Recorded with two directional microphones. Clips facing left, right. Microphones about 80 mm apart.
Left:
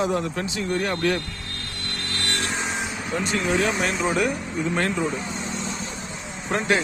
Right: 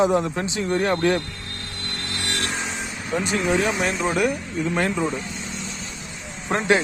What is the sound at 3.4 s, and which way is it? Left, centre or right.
Speech, centre.